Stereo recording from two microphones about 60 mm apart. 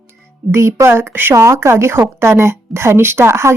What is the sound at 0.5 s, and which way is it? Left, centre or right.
Speech, right.